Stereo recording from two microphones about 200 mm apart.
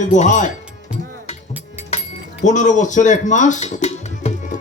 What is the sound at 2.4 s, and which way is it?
Speech, 40° left (ahead or behind).